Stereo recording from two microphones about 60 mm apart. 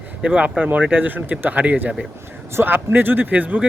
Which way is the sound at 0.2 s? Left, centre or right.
Right.